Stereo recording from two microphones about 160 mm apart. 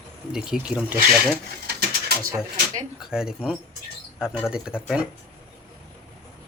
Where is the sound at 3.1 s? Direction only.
5° right (ahead or behind).